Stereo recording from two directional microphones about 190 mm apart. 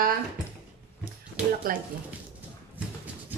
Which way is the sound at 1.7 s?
50° right (ahead or behind).